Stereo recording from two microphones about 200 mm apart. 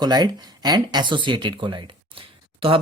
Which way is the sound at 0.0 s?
20° right (ahead or behind).